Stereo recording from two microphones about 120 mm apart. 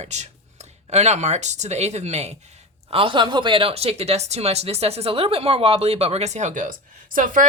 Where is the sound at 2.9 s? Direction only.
45° right (ahead or behind).